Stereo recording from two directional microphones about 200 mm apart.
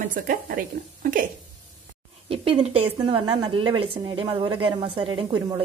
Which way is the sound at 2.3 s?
30° right (ahead or behind).